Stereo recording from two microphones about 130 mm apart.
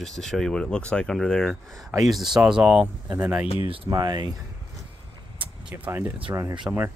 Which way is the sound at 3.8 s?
30° right (ahead or behind).